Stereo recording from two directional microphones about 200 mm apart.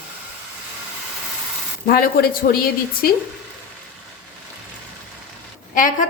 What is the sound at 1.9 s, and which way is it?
A woman's voice, 50° left (ahead or behind).